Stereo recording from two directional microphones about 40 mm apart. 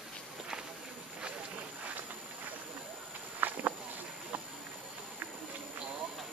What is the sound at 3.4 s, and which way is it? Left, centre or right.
Walk, right.